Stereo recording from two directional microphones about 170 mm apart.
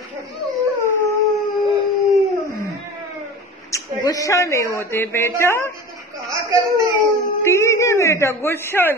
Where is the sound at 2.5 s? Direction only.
20° left (ahead or behind).